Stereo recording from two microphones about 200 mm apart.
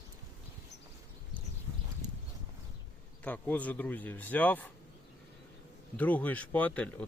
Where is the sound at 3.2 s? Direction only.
10° left (ahead or behind).